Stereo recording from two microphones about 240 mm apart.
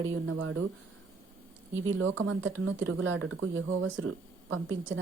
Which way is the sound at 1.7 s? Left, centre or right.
Right.